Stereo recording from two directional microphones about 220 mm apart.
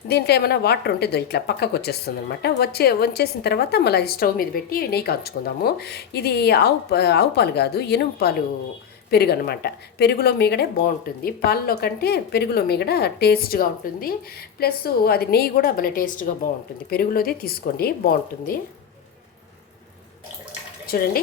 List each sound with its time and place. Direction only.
0.1 s a woman's voice: 50° left (ahead or behind)
20.8 s speech: 40° left (ahead or behind)